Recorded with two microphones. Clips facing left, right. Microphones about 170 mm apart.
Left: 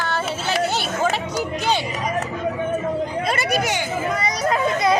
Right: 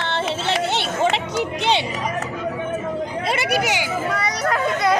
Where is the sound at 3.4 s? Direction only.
10° right (ahead or behind).